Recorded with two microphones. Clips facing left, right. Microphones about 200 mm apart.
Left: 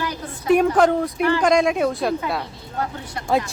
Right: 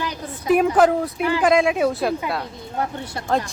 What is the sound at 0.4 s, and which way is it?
A woman's voice, 5° right (ahead or behind).